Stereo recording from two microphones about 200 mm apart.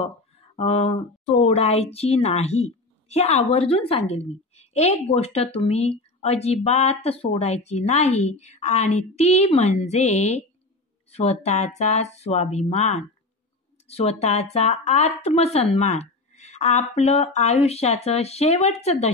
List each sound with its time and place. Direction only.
0.6 s speech: 30° left (ahead or behind)